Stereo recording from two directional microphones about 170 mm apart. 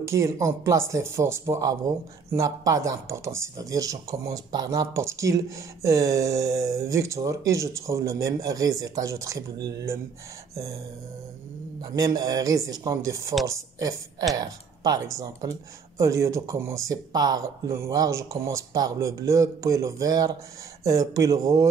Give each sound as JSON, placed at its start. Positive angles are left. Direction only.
{"t": 0.1, "sound": "speech", "side_deg": -15}
{"t": 11.9, "sound": "speech", "side_deg": -20}